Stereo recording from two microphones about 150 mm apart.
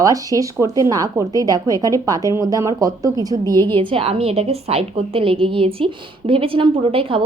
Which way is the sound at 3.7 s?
35° right (ahead or behind).